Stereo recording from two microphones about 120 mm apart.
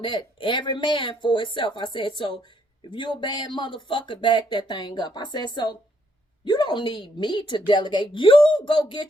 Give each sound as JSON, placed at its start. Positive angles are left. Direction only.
{"t": 0.0, "sound": "speech", "side_deg": 40}